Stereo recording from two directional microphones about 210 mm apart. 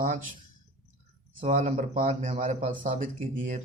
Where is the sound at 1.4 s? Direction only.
35° right (ahead or behind).